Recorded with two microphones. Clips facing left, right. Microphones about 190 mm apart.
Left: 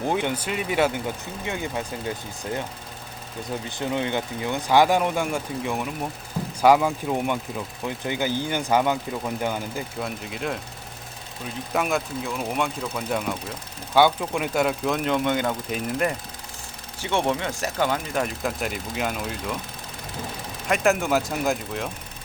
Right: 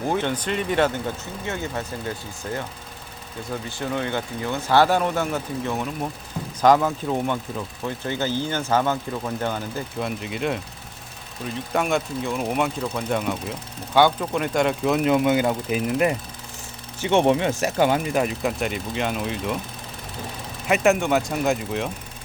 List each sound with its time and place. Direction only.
0.1 s speech: 10° left (ahead or behind)
3.7 s speech: 20° left (ahead or behind)
10.0 s speech: centre (ahead or behind)
11.7 s speech: centre (ahead or behind)
17.0 s speech: 20° right (ahead or behind)
18.6 s speech: centre (ahead or behind)
20.7 s speech: centre (ahead or behind)